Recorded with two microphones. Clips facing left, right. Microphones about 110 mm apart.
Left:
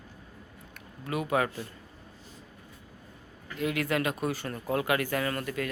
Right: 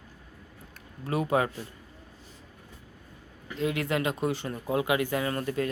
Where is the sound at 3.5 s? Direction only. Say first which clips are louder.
Right 1 dB; 25° right (ahead or behind).